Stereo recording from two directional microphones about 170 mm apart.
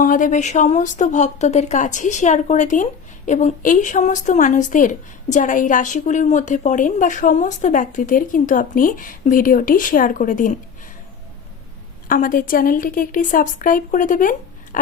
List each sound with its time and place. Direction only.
0.0 s a woman's voice: 50° left (ahead or behind)
12.0 s a woman's voice: 50° left (ahead or behind)